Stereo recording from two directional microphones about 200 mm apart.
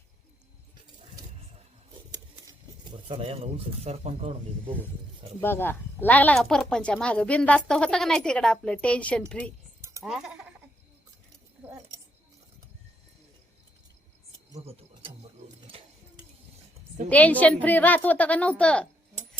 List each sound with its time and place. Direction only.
2.5 s speech: 25° right (ahead or behind)
5.4 s speech: 10° left (ahead or behind)
14.6 s a sound: 30° right (ahead or behind)
15.7 s dishes: 30° right (ahead or behind)
17.1 s a woman's voice: 5° left (ahead or behind)